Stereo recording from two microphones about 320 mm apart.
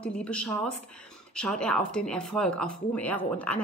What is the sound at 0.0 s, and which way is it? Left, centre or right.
Speech, centre.